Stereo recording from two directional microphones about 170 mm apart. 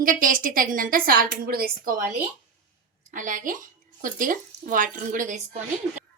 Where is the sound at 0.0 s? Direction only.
55° right (ahead or behind).